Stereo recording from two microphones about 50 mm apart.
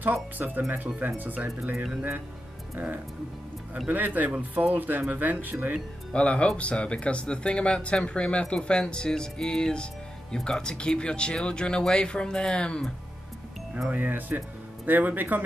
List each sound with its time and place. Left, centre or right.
0.0 s speech: right
3.8 s speech: right
6.1 s speech: left
13.8 s speech: right